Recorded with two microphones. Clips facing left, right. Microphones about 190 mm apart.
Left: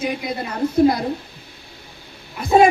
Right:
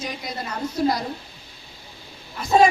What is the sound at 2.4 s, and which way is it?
Speech, 55° left (ahead or behind).